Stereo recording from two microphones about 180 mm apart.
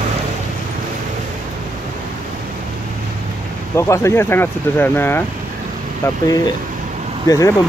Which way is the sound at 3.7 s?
15° left (ahead or behind).